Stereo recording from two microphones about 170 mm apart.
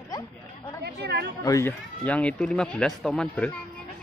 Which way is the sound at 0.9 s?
80° right.